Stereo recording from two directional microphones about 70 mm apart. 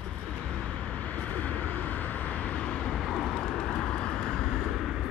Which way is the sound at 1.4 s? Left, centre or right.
Left.